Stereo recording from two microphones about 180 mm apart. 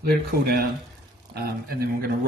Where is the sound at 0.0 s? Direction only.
60° right (ahead or behind).